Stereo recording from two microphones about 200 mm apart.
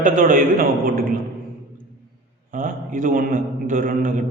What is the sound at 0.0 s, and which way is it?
A man's voice, 40° right (ahead or behind).